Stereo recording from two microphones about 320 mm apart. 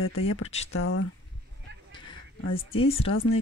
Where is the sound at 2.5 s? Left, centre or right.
Centre.